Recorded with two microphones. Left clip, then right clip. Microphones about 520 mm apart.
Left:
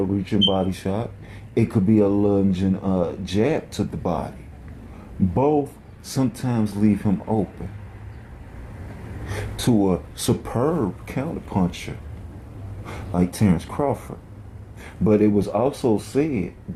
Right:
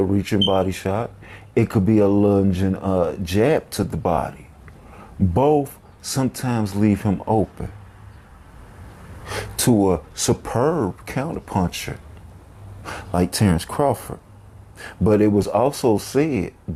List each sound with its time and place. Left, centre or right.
0.3 s speech: right
5.3 s speech: right
9.2 s speech: right
12.8 s speech: right
15.0 s speech: right